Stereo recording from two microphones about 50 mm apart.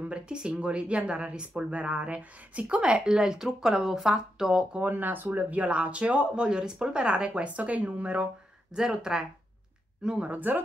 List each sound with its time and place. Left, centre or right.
0.0 s a woman's voice: right
4.8 s speech: right
5.6 s a woman's voice: right
10.2 s speech: right